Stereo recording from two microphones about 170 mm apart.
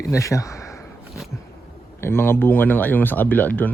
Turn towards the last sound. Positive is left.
turn(degrees=10)  # may be behind; listen again after turning